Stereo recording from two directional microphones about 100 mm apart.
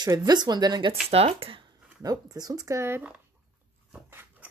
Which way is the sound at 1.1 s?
80° right.